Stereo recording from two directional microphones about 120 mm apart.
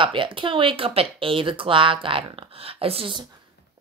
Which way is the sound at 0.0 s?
45° right (ahead or behind).